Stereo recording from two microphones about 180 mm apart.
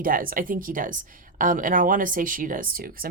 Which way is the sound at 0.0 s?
50° right (ahead or behind).